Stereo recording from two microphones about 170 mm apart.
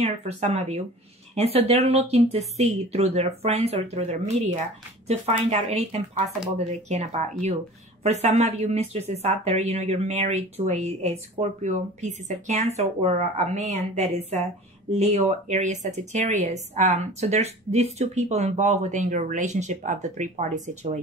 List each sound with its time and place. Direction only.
0.0 s a woman's voice: 40° right (ahead or behind)